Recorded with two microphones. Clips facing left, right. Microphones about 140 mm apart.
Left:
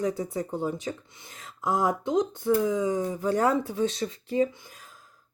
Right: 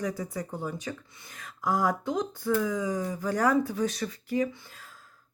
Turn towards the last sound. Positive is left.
turn(degrees=15)  # may be behind; listen again after turning